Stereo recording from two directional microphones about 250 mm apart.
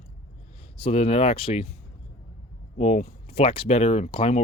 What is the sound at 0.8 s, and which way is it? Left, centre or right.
Speech, left.